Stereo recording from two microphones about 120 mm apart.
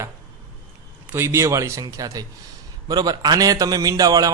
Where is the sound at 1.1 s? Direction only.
20° right (ahead or behind).